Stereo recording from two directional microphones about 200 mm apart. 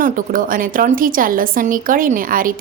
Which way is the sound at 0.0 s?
45° right (ahead or behind).